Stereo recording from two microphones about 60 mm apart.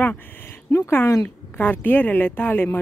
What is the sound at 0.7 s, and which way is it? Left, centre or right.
Speech, left.